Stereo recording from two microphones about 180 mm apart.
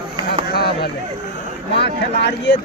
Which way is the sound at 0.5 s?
60° left (ahead or behind).